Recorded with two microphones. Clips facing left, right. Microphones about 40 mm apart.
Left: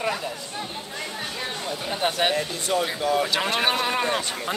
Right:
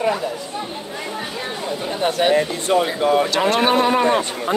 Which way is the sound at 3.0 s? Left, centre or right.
Right.